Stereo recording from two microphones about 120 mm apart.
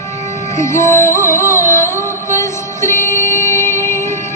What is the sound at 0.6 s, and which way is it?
Music, 25° left (ahead or behind).